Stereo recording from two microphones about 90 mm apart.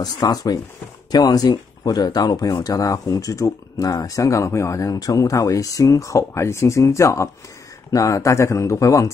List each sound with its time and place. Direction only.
0.0 s speech: 45° left (ahead or behind)